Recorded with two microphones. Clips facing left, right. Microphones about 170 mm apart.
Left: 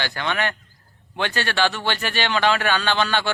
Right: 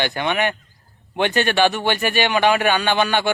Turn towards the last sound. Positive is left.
turn(degrees=-15)  # may be behind; listen again after turning